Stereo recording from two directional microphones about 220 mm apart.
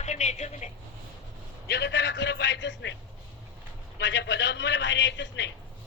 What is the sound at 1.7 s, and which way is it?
A man's voice, 50° left (ahead or behind).